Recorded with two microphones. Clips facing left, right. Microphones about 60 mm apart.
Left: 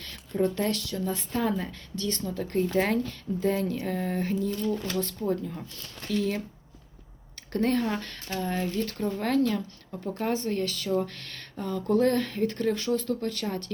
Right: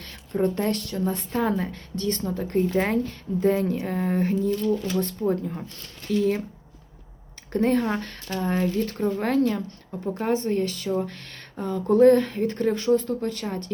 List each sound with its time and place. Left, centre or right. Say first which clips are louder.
0.0 s speech: right 2 dB; right
3.0 s a woman's voice: right 5 dB; right
7.5 s a woman's voice: right 4 dB; right